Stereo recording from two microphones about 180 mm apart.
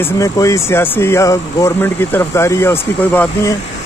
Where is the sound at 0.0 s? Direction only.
15° left (ahead or behind).